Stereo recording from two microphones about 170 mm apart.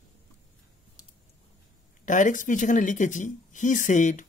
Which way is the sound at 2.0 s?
50° left (ahead or behind).